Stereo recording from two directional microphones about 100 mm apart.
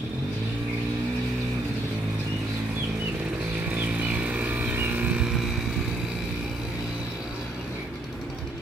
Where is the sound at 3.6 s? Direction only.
15° right (ahead or behind).